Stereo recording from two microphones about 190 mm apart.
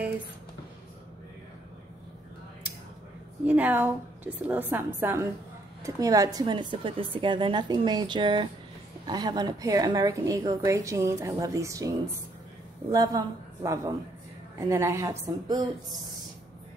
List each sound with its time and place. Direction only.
3.4 s a woman's voice: 10° right (ahead or behind)
12.9 s a woman's voice: 20° right (ahead or behind)